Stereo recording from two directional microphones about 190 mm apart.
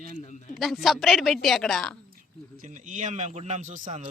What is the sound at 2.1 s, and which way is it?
A man's voice, 45° right (ahead or behind).